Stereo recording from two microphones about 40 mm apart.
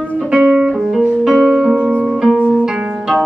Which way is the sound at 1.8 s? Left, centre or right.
Left.